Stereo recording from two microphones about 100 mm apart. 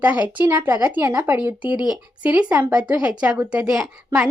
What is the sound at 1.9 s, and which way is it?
A woman's voice, 15° right (ahead or behind).